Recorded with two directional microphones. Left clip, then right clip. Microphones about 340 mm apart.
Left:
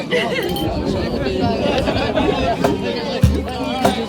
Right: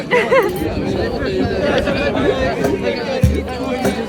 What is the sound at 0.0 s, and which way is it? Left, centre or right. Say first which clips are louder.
Speech: right 6 dB; centre.